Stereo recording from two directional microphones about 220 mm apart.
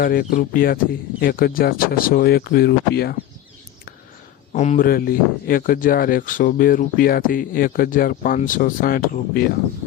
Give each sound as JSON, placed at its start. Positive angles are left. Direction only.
{"t": 0.0, "sound": "speech", "side_deg": 40}
{"t": 4.5, "sound": "speech", "side_deg": 30}